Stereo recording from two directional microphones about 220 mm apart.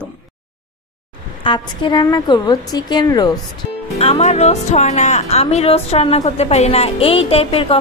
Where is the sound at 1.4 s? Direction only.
20° left (ahead or behind).